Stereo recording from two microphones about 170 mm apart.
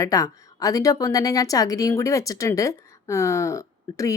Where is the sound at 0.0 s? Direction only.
20° left (ahead or behind).